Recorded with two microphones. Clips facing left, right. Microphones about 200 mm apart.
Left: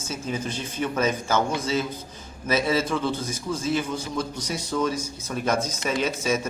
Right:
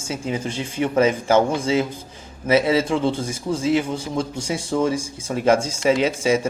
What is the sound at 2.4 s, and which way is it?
A man's voice, 25° right (ahead or behind).